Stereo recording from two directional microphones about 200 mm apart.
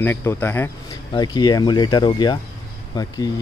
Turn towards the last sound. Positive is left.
turn(degrees=20)  # may be behind; listen again after turning